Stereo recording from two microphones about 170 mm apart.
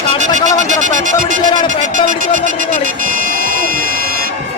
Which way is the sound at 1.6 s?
50° right (ahead or behind).